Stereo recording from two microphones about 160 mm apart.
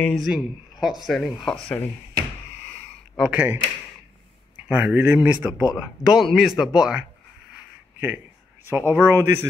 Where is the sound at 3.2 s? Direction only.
10° right (ahead or behind).